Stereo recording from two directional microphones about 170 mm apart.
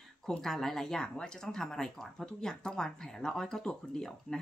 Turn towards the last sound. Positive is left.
turn(degrees=5)  # may be behind; listen again after turning